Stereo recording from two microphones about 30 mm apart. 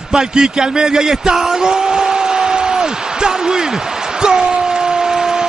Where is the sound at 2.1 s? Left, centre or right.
Right.